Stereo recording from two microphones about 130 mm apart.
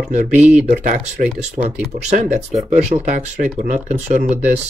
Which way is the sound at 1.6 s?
60° right (ahead or behind).